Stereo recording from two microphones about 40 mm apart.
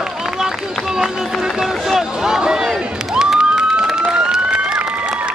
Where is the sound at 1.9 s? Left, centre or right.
Centre.